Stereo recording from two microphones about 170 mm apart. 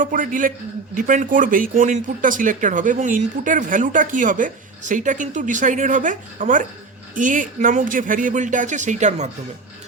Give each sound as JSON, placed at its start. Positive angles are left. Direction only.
{"t": 0.0, "sound": "speech", "side_deg": -50}